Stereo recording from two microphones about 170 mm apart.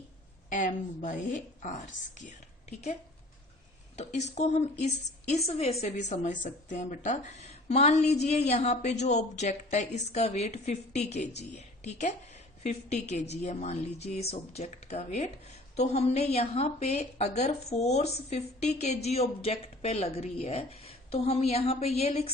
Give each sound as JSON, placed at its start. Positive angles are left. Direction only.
{"t": 0.5, "sound": "speech", "side_deg": 50}
{"t": 3.9, "sound": "a woman's voice", "side_deg": 40}